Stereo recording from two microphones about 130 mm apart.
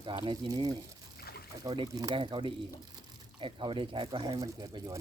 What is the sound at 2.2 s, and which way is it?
Speech, 40° right (ahead or behind).